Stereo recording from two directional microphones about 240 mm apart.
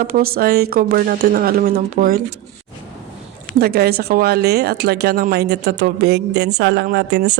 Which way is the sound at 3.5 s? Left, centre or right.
Right.